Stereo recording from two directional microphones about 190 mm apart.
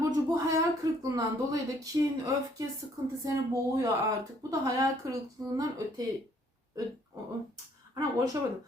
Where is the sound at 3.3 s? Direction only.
15° right (ahead or behind).